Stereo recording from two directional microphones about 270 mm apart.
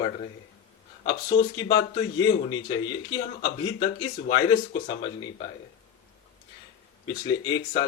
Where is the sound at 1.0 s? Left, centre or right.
Left.